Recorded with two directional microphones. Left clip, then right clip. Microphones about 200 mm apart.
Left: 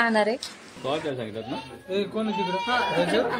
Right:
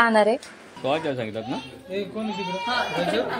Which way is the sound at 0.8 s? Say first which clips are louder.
Right 4 dB; 60° right (ahead or behind).